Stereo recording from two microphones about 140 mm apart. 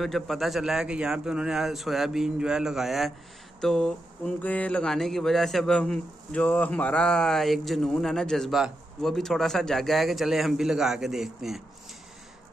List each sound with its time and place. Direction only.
0.0 s a man's voice: centre (ahead or behind)